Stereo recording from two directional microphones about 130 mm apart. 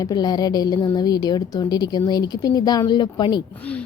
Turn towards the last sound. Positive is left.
turn(degrees=10)  # may be behind; listen again after turning